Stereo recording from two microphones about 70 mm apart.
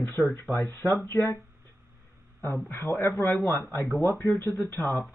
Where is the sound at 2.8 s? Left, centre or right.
Left.